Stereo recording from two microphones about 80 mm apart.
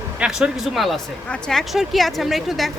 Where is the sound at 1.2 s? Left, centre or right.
Centre.